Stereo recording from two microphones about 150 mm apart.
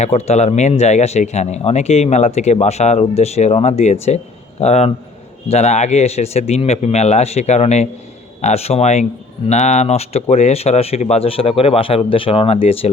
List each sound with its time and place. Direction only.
0.0 s speech: 45° left (ahead or behind)